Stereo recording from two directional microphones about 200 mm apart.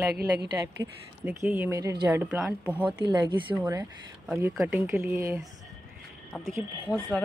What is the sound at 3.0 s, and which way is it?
Speech, 20° right (ahead or behind).